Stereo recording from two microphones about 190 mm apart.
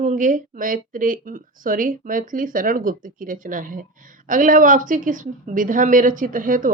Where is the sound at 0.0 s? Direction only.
40° right (ahead or behind).